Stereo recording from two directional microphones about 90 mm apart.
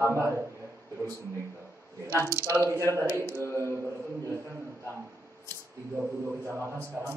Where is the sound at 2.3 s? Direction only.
30° right (ahead or behind).